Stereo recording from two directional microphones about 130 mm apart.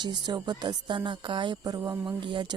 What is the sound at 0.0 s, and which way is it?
Speech, 35° right (ahead or behind).